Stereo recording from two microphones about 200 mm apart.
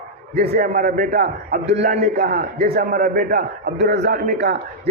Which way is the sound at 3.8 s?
55° right (ahead or behind).